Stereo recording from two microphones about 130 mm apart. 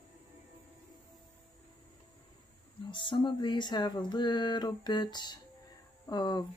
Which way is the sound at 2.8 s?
40° left (ahead or behind).